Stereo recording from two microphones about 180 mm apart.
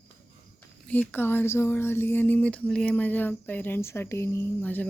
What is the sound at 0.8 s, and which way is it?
Speech, 10° left (ahead or behind).